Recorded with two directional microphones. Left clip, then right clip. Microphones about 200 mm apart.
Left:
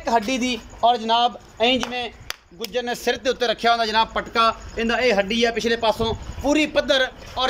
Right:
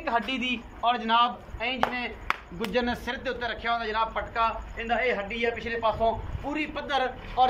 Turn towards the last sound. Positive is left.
turn(degrees=50)  # may be behind; listen again after turning